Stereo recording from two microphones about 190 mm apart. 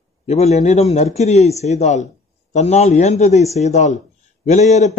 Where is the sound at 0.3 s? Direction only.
35° left (ahead or behind).